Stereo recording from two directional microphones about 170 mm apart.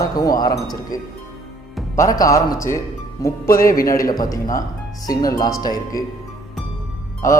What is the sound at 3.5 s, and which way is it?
Speech, 60° left (ahead or behind).